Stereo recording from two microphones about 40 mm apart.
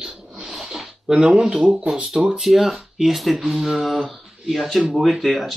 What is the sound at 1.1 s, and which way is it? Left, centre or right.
Speech, right.